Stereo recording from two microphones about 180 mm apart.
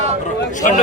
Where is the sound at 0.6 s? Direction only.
45° left (ahead or behind).